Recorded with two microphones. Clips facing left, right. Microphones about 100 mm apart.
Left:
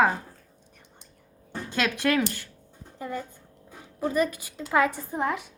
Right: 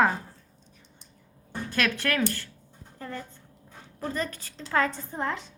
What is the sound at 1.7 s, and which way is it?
Speech, 20° left (ahead or behind).